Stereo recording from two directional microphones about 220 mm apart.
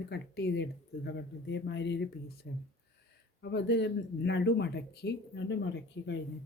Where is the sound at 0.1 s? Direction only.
50° left (ahead or behind).